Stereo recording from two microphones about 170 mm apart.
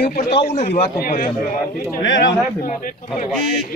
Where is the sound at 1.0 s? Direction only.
55° left (ahead or behind).